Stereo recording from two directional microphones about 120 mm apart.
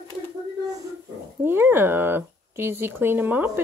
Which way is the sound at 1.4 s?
20° right (ahead or behind).